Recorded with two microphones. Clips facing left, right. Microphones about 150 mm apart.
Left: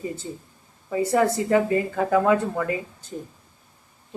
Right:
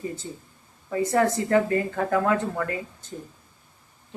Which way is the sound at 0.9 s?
10° left (ahead or behind).